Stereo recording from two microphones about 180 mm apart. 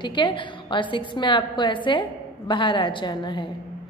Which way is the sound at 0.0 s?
25° left (ahead or behind).